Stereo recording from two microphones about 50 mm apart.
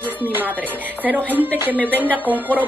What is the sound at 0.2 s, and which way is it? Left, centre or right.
Speech, right.